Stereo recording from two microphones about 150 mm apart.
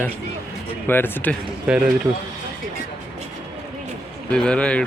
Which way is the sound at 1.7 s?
5° right (ahead or behind).